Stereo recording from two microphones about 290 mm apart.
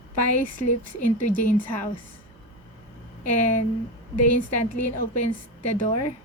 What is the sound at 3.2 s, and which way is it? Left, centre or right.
A woman's voice, left.